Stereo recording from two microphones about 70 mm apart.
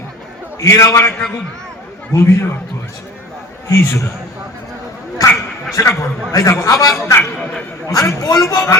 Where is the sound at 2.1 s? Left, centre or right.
Left.